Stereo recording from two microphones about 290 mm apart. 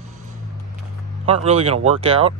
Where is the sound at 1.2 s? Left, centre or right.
Right.